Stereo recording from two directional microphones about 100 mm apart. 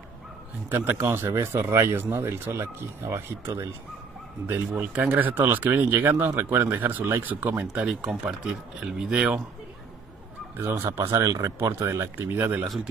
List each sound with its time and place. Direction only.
0.7 s speech: 20° right (ahead or behind)
10.6 s speech: 25° right (ahead or behind)
11.1 s speech: 35° right (ahead or behind)